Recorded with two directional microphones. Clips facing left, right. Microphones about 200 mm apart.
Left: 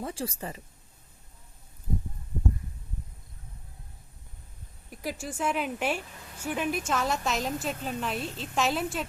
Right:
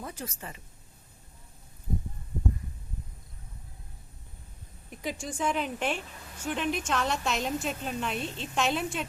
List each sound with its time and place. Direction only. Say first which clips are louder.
0.0 s speech: left 5 dB; 30° left (ahead or behind)
4.9 s a woman's voice: even; 5° left (ahead or behind)